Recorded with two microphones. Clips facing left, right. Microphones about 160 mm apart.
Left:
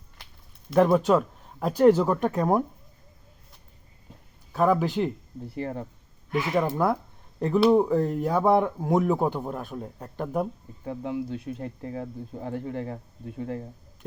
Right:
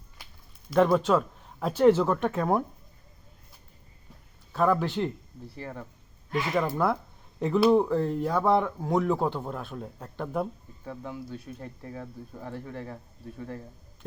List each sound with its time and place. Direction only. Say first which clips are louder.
0.7 s speech: left 2 dB; 5° left (ahead or behind)
4.5 s speech: left 2 dB; 10° left (ahead or behind)
5.5 s speech: left 7 dB; 30° left (ahead or behind)
6.3 s speech: left 2 dB; 10° left (ahead or behind)
7.3 s speech: left 2 dB; centre (ahead or behind)
10.8 s speech: left 7 dB; 25° left (ahead or behind)